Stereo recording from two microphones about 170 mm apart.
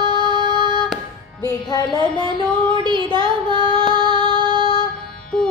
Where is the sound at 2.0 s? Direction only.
30° right (ahead or behind).